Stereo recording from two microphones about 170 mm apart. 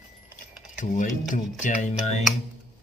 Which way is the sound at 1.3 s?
45° left (ahead or behind).